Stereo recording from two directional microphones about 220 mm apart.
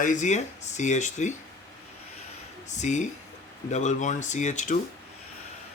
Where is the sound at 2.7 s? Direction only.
35° left (ahead or behind).